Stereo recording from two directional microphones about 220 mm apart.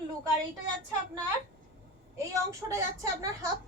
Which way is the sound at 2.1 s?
15° right (ahead or behind).